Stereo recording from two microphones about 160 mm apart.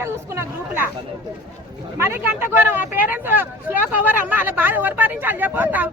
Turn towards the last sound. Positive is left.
turn(degrees=-10)  # may be behind; listen again after turning